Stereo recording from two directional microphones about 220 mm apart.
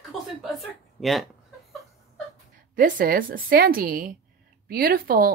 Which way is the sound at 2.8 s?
40° right (ahead or behind).